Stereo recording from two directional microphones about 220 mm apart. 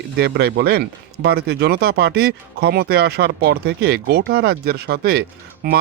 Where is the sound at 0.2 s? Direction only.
45° right (ahead or behind).